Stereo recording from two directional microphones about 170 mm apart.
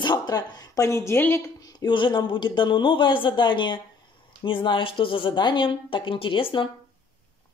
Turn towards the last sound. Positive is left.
turn(degrees=30)  # may be behind; listen again after turning